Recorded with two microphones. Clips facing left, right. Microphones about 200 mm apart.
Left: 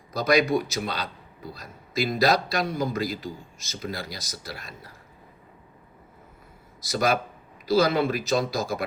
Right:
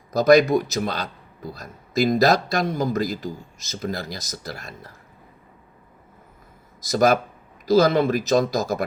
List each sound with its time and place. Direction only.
0.1 s a man's voice: 45° right (ahead or behind)
6.8 s a man's voice: 45° right (ahead or behind)